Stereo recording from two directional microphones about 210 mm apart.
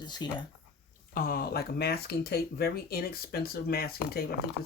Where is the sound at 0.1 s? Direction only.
20° left (ahead or behind).